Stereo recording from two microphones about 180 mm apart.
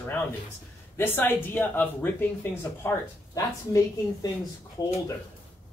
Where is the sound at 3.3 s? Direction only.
20° left (ahead or behind).